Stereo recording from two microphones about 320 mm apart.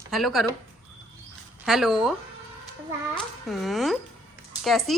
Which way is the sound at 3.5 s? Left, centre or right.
Centre.